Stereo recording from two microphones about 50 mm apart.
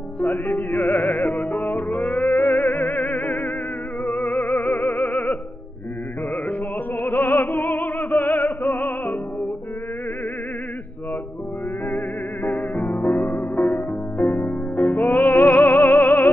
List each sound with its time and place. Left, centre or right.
0.2 s music: left
7.0 s music: left
12.4 s music: left